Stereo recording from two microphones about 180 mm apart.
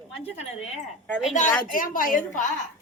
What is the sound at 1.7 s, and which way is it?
Speech, 50° left (ahead or behind).